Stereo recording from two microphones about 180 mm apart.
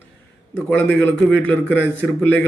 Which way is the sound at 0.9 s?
10° left (ahead or behind).